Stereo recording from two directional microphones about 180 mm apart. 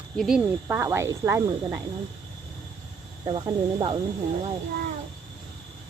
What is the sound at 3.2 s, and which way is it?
Speech, 30° right (ahead or behind).